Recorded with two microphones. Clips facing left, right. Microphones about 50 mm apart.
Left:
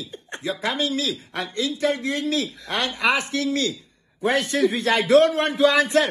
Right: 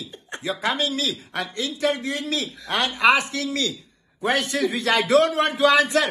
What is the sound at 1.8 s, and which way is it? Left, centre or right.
A man's voice, right.